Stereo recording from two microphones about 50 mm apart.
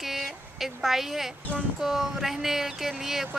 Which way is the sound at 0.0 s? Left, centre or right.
Centre.